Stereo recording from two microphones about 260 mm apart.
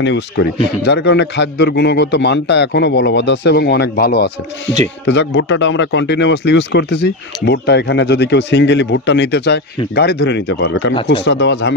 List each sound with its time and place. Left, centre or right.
0.0 s speech: left